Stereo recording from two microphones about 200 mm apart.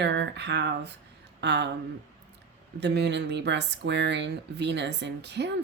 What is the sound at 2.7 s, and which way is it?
Speech, 55° right (ahead or behind).